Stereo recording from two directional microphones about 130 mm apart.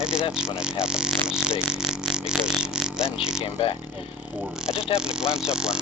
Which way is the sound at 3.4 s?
45° left (ahead or behind).